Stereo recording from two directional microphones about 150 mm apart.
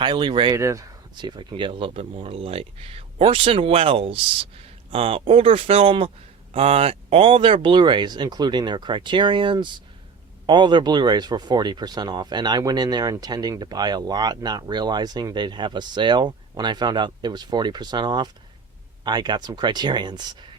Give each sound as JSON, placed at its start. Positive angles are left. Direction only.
{"t": 0.0, "sound": "speech", "side_deg": -30}
{"t": 0.5, "sound": "speech", "side_deg": -20}